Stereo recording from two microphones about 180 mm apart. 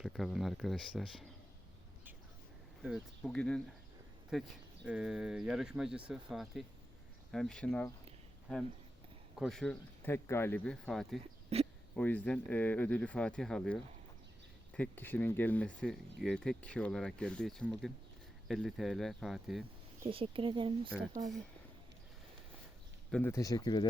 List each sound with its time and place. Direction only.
0.0 s speech: centre (ahead or behind)
2.8 s speech: centre (ahead or behind)
9.4 s speech: centre (ahead or behind)
10.1 s speech: 15° left (ahead or behind)
11.4 s a sound: 35° right (ahead or behind)
11.9 s speech: 10° left (ahead or behind)
20.1 s speech: 30° right (ahead or behind)
23.1 s speech: 15° left (ahead or behind)